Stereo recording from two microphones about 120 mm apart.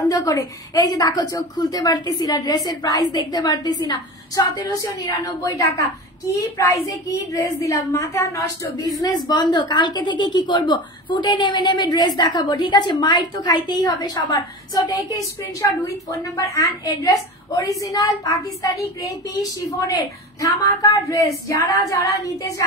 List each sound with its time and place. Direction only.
0.1 s a woman's voice: 30° left (ahead or behind)